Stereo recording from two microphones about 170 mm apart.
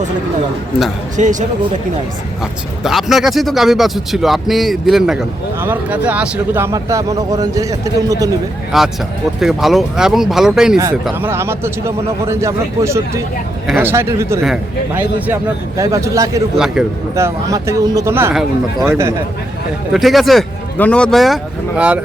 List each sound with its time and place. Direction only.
1.1 s speech: 45° right (ahead or behind)
2.4 s speech: centre (ahead or behind); by 8.3 s 20° right (ahead or behind)
8.7 s speech: centre (ahead or behind)
11.2 s a man's voice: 15° right (ahead or behind)
15.8 s a man's voice: 20° right (ahead or behind)
16.6 s speech: 5° right (ahead or behind)
17.2 s a man's voice: 15° right (ahead or behind)
19.9 s a man's voice: centre (ahead or behind)